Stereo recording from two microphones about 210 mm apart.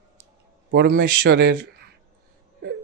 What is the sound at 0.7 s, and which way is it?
Speech, 50° right (ahead or behind).